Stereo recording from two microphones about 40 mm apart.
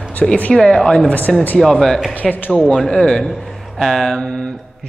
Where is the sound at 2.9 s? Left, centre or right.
Centre.